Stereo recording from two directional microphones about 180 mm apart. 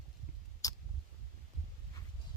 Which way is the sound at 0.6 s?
20° left (ahead or behind).